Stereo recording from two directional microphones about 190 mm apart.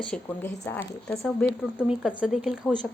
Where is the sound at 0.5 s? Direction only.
15° left (ahead or behind).